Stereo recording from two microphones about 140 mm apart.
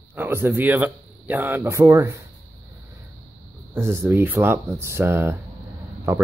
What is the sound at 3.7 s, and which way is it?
Speech, 20° right (ahead or behind).